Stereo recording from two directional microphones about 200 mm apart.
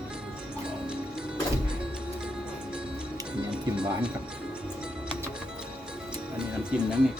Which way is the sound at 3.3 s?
5° right (ahead or behind).